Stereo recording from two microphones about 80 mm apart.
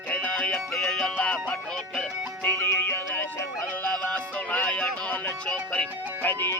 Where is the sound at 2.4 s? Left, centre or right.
Left.